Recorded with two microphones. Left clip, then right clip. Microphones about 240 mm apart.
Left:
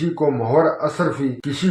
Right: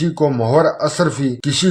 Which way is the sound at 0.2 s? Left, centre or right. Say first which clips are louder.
Right 3 dB; right.